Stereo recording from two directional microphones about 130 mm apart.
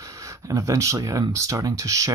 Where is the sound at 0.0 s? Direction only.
25° right (ahead or behind).